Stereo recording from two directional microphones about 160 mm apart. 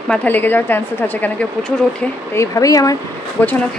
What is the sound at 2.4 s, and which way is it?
Speech, 20° left (ahead or behind).